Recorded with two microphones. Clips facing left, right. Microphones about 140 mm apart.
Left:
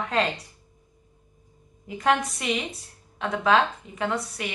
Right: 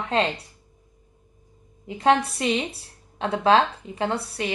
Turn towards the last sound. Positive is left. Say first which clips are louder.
# right 2 dB
turn(degrees=-30)  # may be behind; listen again after turning